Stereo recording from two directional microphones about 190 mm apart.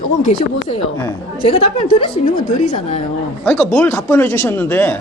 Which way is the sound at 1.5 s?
30° left (ahead or behind).